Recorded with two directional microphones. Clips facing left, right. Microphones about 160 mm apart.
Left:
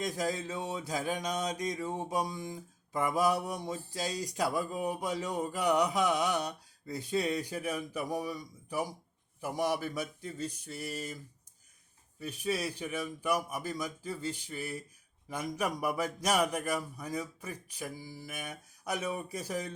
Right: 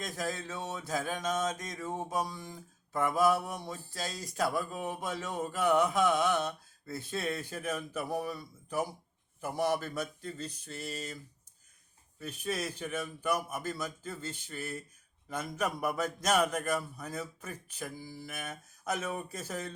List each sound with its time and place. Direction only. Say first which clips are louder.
0.2 s a man's voice: left 3 dB; 15° left (ahead or behind)
12.2 s a man's voice: left 2 dB; 10° left (ahead or behind)